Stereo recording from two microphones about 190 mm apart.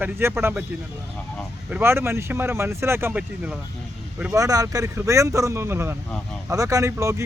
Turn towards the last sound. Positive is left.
turn(degrees=-15)  # may be behind; listen again after turning